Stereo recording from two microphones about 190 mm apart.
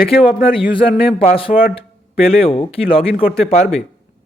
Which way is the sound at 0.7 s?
30° left (ahead or behind).